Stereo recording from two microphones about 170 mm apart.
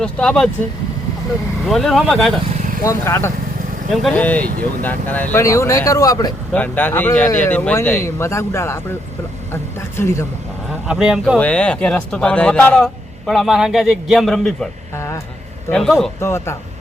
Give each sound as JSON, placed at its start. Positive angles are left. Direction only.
{"t": 0.0, "sound": "a man's voice", "side_deg": 5}
{"t": 1.6, "sound": "a man's voice", "side_deg": 0}
{"t": 2.8, "sound": "speech", "side_deg": 15}
{"t": 3.9, "sound": "speech", "side_deg": 5}
{"t": 6.5, "sound": "speech", "side_deg": 10}
{"t": 10.0, "sound": "speech", "side_deg": 15}
{"t": 10.7, "sound": "a man's voice", "side_deg": 0}
{"t": 11.3, "sound": "a man's voice", "side_deg": 5}
{"t": 14.9, "sound": "vehicle", "side_deg": 15}
{"t": 15.7, "sound": "a man's voice", "side_deg": 0}
{"t": 16.2, "sound": "speech", "side_deg": 15}